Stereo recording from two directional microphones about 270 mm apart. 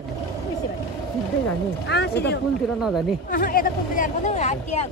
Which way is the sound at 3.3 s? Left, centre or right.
Left.